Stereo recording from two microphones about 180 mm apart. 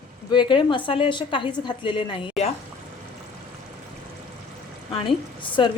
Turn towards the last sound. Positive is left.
turn(degrees=25)  # may be behind; listen again after turning